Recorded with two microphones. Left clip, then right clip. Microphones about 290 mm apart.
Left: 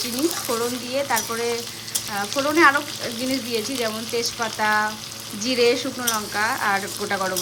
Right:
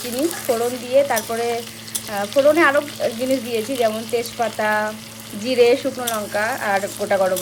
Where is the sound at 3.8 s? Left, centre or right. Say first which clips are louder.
Right 5 dB; centre.